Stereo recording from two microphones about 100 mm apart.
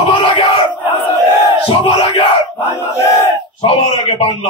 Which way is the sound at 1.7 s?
65° left (ahead or behind).